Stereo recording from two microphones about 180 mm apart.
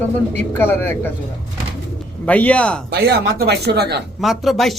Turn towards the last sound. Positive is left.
turn(degrees=0)  # may be behind; listen again after turning